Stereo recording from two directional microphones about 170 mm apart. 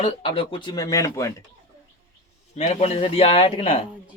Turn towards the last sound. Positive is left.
turn(degrees=35)  # may be behind; listen again after turning